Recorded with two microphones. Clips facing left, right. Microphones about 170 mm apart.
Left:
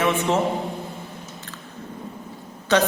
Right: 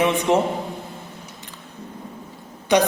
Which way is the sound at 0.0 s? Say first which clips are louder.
Right 2 dB; 15° right (ahead or behind).